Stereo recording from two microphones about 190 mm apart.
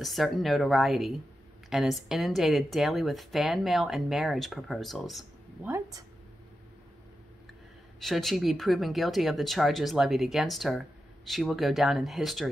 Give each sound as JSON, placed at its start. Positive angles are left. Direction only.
{"t": 0.0, "sound": "speech", "side_deg": 0}
{"t": 5.7, "sound": "speech", "side_deg": -20}
{"t": 8.0, "sound": "speech", "side_deg": 0}